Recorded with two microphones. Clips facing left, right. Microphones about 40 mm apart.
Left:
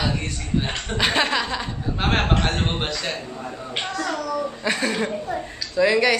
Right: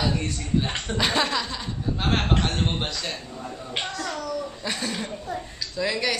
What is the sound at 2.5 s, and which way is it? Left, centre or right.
Speech, left.